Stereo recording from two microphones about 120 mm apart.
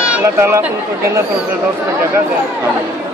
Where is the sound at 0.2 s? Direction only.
20° right (ahead or behind).